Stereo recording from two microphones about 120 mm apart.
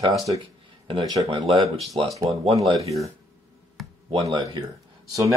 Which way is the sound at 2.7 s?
60° right (ahead or behind).